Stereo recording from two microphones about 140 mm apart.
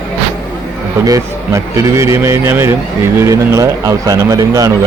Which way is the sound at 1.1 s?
20° right (ahead or behind).